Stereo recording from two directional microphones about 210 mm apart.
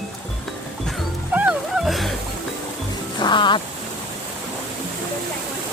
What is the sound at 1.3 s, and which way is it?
Music, 5° right (ahead or behind).